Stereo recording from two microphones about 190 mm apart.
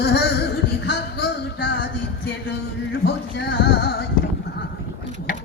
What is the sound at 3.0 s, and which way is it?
Music, 60° left (ahead or behind).